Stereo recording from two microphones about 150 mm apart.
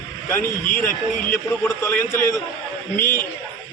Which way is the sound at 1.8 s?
15° left (ahead or behind).